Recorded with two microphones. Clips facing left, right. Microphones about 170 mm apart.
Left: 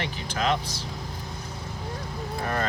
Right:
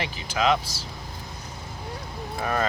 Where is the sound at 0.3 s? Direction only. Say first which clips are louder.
Right 3 dB; 90° right.